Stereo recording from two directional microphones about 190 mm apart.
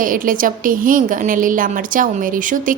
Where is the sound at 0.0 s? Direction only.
45° right (ahead or behind).